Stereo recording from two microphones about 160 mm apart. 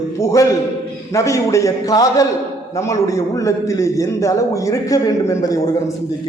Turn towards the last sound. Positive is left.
turn(degrees=20)  # may be behind; listen again after turning